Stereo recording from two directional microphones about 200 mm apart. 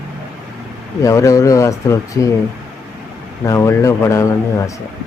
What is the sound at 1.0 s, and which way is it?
Speech, 15° left (ahead or behind).